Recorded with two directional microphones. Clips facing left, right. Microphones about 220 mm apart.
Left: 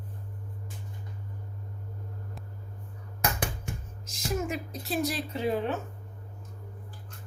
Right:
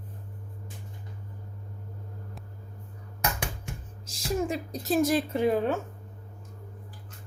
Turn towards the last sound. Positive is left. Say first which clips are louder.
# right 4 dB
turn(degrees=-50)  # may be behind; listen again after turning